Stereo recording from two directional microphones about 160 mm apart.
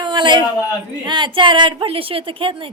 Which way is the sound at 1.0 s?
30° right (ahead or behind).